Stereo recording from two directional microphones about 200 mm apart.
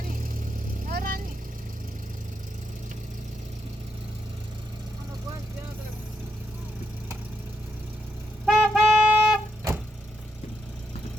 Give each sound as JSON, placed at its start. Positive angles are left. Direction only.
{"t": 0.9, "sound": "vehicle", "side_deg": -45}
{"t": 8.4, "sound": "music", "side_deg": 0}